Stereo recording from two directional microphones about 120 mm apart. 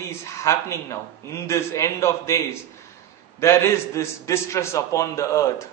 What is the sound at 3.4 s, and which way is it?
A man's voice, 25° left (ahead or behind).